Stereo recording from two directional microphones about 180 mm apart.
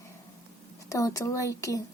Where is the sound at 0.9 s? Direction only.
20° left (ahead or behind).